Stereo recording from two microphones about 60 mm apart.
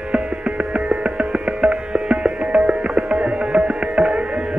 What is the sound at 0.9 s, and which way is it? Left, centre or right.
Music, centre.